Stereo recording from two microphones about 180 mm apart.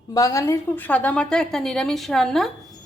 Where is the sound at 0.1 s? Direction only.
20° left (ahead or behind).